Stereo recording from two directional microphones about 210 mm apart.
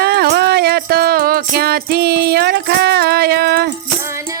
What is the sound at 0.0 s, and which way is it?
Music, 50° right (ahead or behind).